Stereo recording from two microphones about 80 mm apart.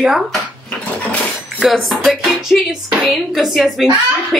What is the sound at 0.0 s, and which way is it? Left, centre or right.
Speech, centre.